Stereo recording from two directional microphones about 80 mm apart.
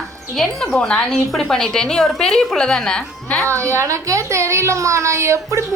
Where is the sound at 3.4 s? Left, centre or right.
Right.